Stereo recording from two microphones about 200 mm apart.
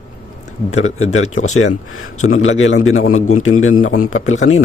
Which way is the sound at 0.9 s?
90° left.